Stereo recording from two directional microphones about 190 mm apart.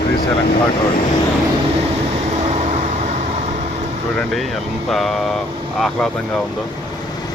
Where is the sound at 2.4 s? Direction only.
35° right (ahead or behind).